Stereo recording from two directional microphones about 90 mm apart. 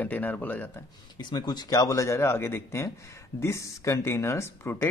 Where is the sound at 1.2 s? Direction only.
55° left (ahead or behind).